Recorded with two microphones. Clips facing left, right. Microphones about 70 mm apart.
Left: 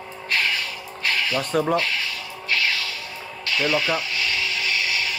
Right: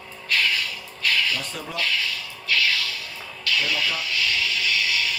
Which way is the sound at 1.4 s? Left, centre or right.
Left.